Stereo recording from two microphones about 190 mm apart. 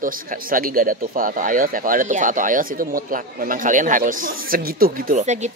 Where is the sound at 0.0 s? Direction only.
45° right (ahead or behind).